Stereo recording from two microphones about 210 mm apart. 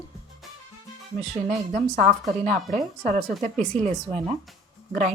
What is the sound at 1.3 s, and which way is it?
A woman's voice, 35° right (ahead or behind).